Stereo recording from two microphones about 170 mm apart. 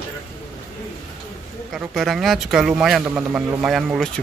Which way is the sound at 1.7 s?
Centre (ahead or behind).